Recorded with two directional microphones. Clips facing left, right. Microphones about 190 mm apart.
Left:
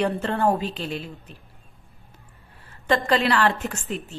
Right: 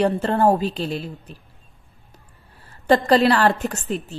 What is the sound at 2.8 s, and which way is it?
A woman's voice, 35° right (ahead or behind).